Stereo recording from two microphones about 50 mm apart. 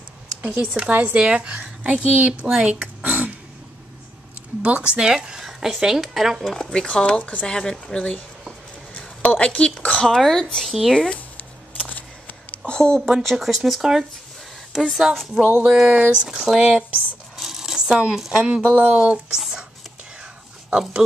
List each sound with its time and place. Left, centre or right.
0.5 s speech: right
3.0 s throat clearing: right
4.6 s speech: right; by 6.4 s centre
6.4 s speech: centre
9.4 s speech: centre
11.8 s a sound: left
12.6 s speech: centre
13.2 s speech: centre
15.4 s speech: right
15.7 s speech: centre
17.4 s a sound: centre
18.3 s speech: right
19.3 s a sound: centre